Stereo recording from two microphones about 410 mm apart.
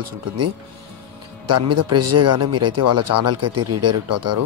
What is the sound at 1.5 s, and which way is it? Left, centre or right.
Speech, right.